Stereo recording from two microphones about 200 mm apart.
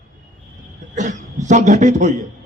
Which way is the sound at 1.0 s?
40° right (ahead or behind).